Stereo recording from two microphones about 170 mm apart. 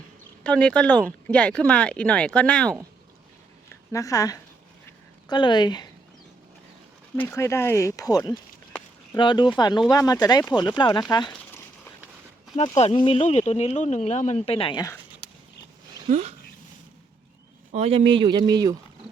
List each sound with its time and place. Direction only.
0.4 s speech: 5° left (ahead or behind)
3.9 s speech: 20° left (ahead or behind)
7.2 s speech: 15° left (ahead or behind)
12.5 s speech: 40° left (ahead or behind)
16.0 s speech: 40° right (ahead or behind)
17.7 s speech: 35° right (ahead or behind)